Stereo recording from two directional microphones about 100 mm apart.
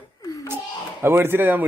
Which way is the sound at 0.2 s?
35° left (ahead or behind).